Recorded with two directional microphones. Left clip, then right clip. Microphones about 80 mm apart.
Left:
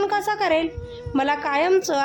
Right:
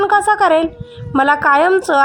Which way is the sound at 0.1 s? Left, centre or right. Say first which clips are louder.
Right 9 dB; right.